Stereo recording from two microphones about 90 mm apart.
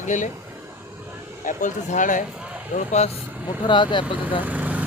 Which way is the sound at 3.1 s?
20° right (ahead or behind).